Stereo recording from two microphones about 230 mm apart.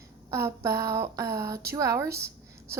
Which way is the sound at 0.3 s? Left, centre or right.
Centre.